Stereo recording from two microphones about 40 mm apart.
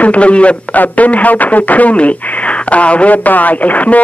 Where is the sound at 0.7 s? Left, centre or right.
Left.